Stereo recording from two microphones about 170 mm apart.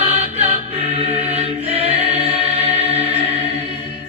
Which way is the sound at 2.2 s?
35° right (ahead or behind).